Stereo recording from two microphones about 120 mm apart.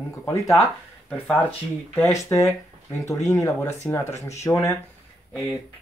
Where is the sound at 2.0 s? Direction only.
25° left (ahead or behind).